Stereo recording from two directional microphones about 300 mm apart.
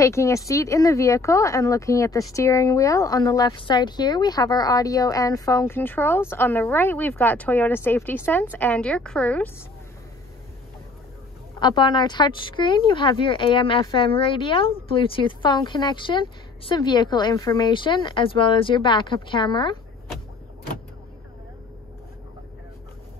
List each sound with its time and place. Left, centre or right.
0.0 s speech: centre
11.6 s speech: centre